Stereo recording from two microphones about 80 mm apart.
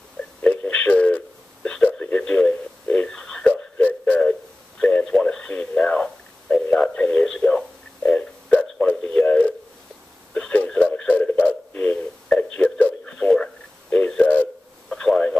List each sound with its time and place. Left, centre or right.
0.2 s a sound: centre
6.5 s telephone: centre
10.3 s radio: centre
12.4 s a sound: centre
13.3 s radio: centre
14.9 s radio: centre